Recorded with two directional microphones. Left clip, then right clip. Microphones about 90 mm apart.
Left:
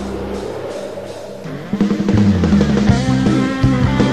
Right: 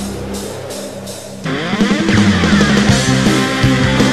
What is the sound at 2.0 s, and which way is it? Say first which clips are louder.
Music: right 3 dB; 35° right (ahead or behind).